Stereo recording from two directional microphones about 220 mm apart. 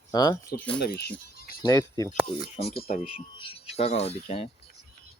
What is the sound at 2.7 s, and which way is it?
Speech, 45° left (ahead or behind).